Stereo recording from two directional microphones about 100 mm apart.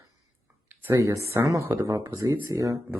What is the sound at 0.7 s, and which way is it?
Speech, 25° right (ahead or behind).